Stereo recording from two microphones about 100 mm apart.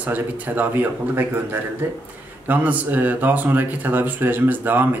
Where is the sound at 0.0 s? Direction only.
15° right (ahead or behind).